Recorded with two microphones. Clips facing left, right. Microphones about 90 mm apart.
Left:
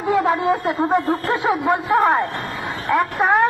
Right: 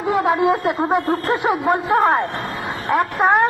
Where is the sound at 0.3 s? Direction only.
5° right (ahead or behind).